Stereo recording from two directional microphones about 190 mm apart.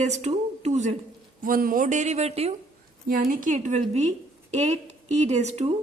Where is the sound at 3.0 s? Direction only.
50° right (ahead or behind).